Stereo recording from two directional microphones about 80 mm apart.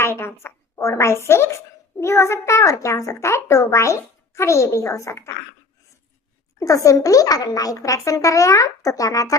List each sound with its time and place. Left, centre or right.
0.0 s a woman's voice: left
6.6 s speech: left